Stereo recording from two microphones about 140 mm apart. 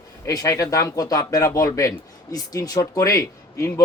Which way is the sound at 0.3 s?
25° left (ahead or behind).